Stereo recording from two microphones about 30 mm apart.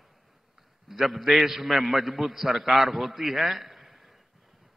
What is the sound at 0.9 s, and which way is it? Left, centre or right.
A man's voice, centre.